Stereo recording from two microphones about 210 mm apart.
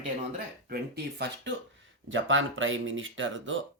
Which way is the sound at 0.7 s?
50° right (ahead or behind).